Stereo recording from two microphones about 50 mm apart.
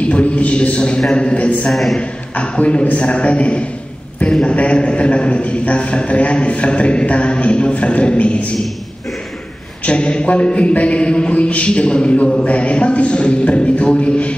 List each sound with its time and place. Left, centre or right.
0.0 s a man's voice: left
1.7 s a man's voice: centre
2.0 s a man's voice: left
9.8 s a man's voice: left